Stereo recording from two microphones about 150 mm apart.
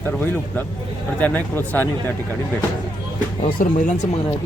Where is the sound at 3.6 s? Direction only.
60° left (ahead or behind).